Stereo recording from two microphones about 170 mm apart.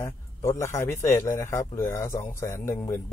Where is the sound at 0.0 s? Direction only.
15° left (ahead or behind).